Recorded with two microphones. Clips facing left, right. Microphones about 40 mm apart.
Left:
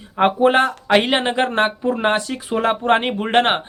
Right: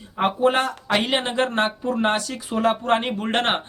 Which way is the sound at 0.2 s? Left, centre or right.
Left.